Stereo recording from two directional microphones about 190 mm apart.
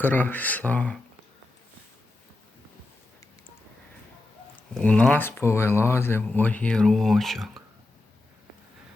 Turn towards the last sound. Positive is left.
turn(degrees=0)  # may be behind; listen again after turning